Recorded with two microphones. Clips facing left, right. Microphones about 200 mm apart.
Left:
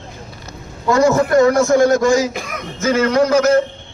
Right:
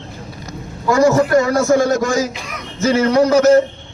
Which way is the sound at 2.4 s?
50° left (ahead or behind).